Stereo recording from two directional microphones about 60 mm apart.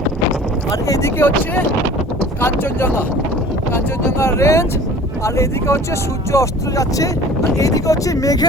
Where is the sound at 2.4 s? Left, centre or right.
Left.